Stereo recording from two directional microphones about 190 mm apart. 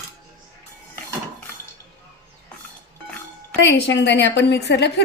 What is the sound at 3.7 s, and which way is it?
A woman's voice, 70° left (ahead or behind).